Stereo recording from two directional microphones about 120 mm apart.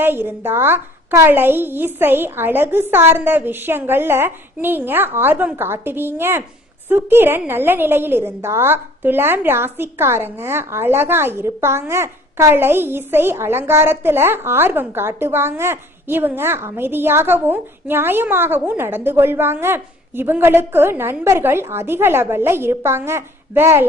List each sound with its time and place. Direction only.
0.0 s a woman's voice: 20° right (ahead or behind)